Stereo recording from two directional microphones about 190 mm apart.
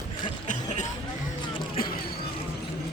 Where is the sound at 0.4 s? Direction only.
40° left (ahead or behind).